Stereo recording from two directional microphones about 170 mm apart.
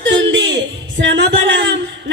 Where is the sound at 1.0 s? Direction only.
90° right.